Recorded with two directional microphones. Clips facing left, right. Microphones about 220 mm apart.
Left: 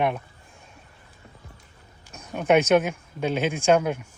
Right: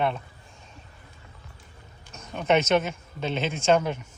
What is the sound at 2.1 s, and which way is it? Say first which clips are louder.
Speech: left 3 dB; 10° left (ahead or behind).